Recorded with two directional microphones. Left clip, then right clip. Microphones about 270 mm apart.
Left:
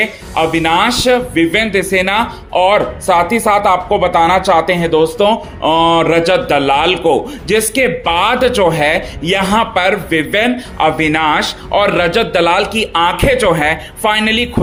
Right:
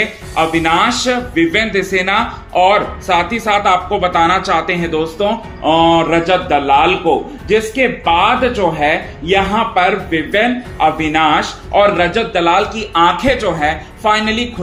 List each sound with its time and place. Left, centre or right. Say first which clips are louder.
0.0 s speech: left 1 dB; left